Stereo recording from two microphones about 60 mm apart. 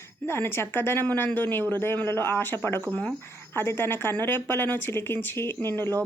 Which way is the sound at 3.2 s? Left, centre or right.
Left.